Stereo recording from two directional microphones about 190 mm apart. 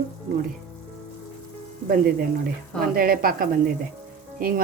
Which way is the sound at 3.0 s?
50° right (ahead or behind).